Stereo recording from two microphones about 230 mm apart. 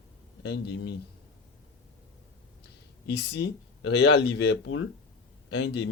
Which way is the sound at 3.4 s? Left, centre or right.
Left.